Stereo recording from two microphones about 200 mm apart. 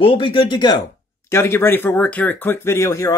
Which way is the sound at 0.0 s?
25° left (ahead or behind).